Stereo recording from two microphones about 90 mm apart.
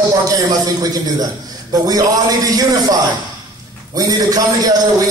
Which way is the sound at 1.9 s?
40° right (ahead or behind).